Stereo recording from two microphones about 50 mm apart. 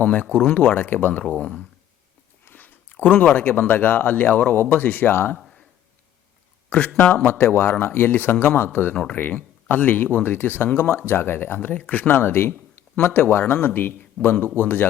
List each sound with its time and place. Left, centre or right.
0.0 s a man's voice: left
0.8 s a man's voice: left
2.6 s a sound: left
3.2 s a man's voice: left
4.6 s speech: left
5.4 s a sound: centre
6.7 s a man's voice: left
11.7 s a man's voice: left